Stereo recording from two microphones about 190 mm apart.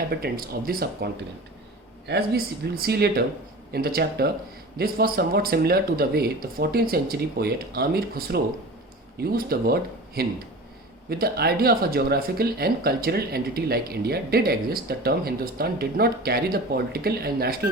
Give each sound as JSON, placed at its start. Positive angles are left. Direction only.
{"t": 0.1, "sound": "speech", "side_deg": -50}